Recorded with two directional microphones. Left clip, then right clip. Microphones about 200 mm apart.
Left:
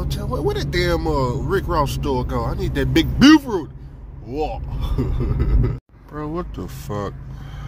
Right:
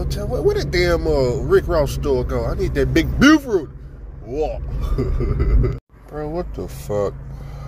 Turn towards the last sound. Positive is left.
turn(degrees=5)  # may be behind; listen again after turning